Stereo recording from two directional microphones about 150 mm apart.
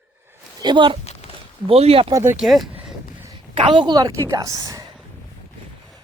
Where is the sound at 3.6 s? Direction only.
35° right (ahead or behind).